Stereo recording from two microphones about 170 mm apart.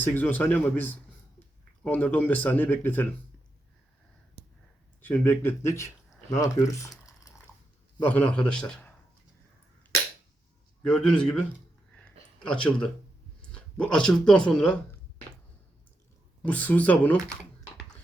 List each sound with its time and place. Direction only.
0.0 s speech: 10° left (ahead or behind)
5.0 s speech: 10° left (ahead or behind)
8.0 s speech: 10° left (ahead or behind)
10.8 s a man's voice: 5° left (ahead or behind)
11.9 s a sound: 5° left (ahead or behind)
13.5 s speech: 5° left (ahead or behind)
16.4 s speech: 10° left (ahead or behind)